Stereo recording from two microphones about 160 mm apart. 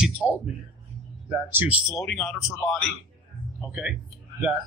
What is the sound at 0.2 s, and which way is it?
Speech, 20° left (ahead or behind).